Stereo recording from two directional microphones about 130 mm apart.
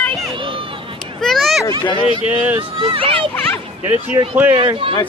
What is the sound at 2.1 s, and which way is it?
Speech, 40° left (ahead or behind).